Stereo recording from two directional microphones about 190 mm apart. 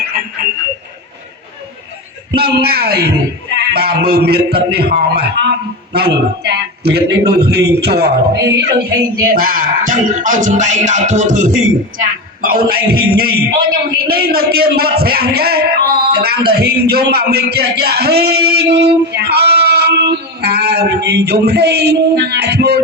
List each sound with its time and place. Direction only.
2.3 s a man's voice: 55° right (ahead or behind)
9.3 s music: 50° right (ahead or behind)
11.9 s a man's voice: 50° right (ahead or behind)